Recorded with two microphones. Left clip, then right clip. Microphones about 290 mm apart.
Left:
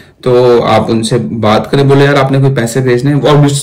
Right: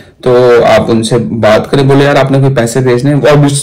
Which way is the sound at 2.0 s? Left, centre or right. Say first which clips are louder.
Right 1 dB; centre.